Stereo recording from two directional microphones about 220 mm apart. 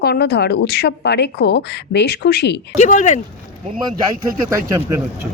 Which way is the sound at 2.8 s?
35° left (ahead or behind).